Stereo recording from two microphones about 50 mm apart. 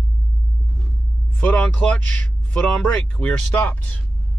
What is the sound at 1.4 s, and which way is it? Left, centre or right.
Speech, left.